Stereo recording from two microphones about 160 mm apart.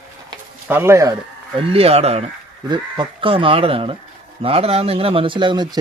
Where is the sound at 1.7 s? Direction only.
40° right (ahead or behind).